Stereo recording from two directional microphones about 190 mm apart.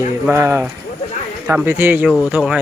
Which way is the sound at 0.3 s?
15° right (ahead or behind).